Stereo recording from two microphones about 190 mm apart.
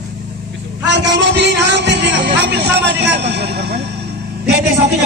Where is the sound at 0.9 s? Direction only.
65° right (ahead or behind).